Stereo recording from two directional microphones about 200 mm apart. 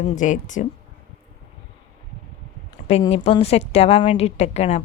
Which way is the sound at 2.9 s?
30° left (ahead or behind).